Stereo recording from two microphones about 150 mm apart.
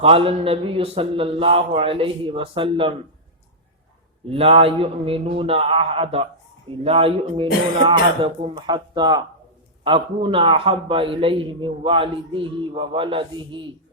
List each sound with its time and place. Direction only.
0.0 s a man's voice: 40° right (ahead or behind)
4.3 s a man's voice: 40° right (ahead or behind)